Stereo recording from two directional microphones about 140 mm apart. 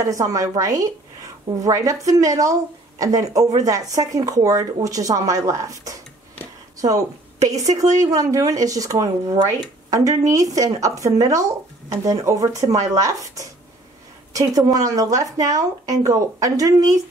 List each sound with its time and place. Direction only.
0.0 s a woman's voice: 25° right (ahead or behind)